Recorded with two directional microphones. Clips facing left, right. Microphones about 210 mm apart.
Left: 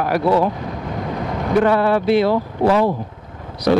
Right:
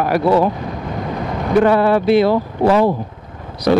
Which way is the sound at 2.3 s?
25° right (ahead or behind).